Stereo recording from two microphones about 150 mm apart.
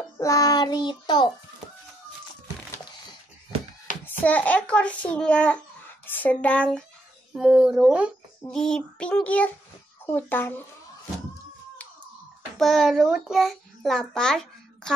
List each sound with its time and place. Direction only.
0.2 s child singing: 25° left (ahead or behind)
4.2 s a child's voice: 10° left (ahead or behind)
7.3 s a child's voice: 5° right (ahead or behind); by 10.5 s 15° left (ahead or behind)
12.5 s a child's voice: centre (ahead or behind)